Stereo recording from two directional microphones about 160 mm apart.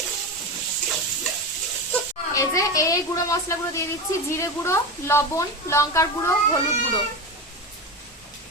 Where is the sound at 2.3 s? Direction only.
20° left (ahead or behind).